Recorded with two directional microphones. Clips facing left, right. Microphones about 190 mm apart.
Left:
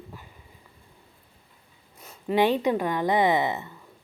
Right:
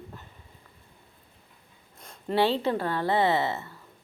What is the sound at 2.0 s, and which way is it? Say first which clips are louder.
Speech: left 2 dB; 5° left (ahead or behind).